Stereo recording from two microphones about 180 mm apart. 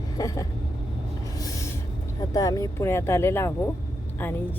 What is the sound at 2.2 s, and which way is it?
A woman's voice, 20° left (ahead or behind).